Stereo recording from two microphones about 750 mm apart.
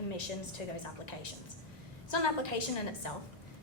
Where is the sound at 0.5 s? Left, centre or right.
Left.